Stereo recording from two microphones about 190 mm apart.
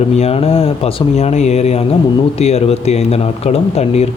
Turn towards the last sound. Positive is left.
turn(degrees=35)  # may be behind; listen again after turning